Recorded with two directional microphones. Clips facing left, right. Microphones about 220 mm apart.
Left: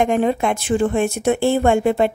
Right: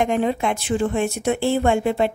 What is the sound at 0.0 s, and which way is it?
Speech, 50° left (ahead or behind).